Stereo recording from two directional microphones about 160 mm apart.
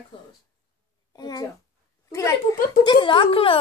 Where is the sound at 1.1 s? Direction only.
25° left (ahead or behind).